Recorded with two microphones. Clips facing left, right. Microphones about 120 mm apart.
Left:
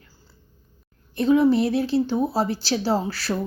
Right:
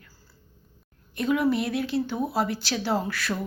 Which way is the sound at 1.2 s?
30° left (ahead or behind).